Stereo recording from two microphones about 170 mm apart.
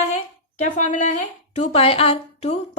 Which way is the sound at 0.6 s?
45° left (ahead or behind).